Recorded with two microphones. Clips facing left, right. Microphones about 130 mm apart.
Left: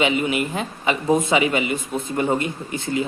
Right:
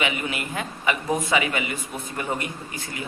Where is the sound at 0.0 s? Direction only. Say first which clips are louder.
Left 7 dB; 25° left (ahead or behind).